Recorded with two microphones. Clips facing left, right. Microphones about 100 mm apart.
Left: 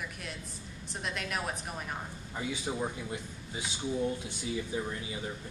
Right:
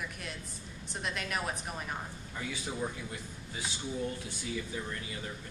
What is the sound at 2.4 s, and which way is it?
A man's voice, 20° left (ahead or behind).